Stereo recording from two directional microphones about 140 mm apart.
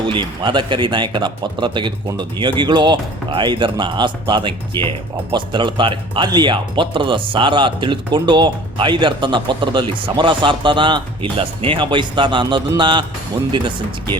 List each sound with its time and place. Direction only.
0.0 s speech: 35° right (ahead or behind)